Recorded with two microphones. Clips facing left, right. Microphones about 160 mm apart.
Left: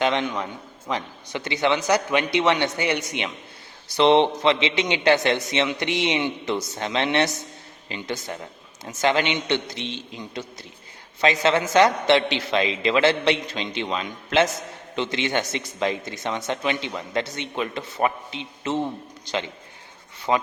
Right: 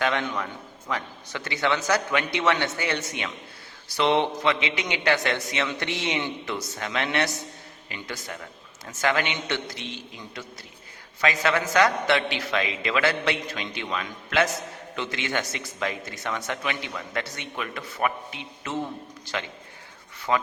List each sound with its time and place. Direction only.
0.0 s speech: 20° left (ahead or behind)